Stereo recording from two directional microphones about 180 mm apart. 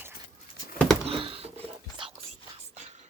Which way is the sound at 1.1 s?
30° right (ahead or behind).